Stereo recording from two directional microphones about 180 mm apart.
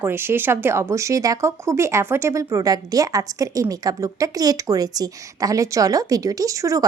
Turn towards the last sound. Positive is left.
turn(degrees=-20)  # may be behind; listen again after turning